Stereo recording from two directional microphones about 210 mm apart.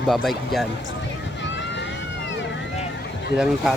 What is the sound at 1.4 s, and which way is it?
Vehicle, 55° left (ahead or behind).